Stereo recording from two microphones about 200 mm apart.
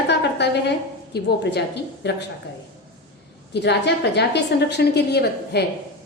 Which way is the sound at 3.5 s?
55° left (ahead or behind).